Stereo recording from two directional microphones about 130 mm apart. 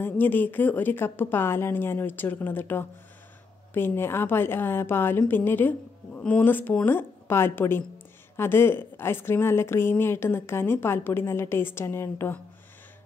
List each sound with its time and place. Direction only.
0.0 s a woman's voice: 15° left (ahead or behind)